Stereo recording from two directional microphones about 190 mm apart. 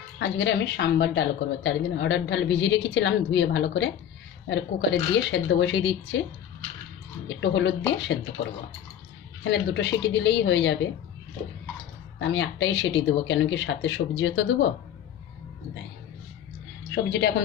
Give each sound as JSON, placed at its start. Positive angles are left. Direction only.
{"t": 0.2, "sound": "a woman's voice", "side_deg": 70}
{"t": 7.2, "sound": "a woman's voice", "side_deg": 70}
{"t": 12.2, "sound": "a woman's voice", "side_deg": 70}
{"t": 16.9, "sound": "a woman's voice", "side_deg": 65}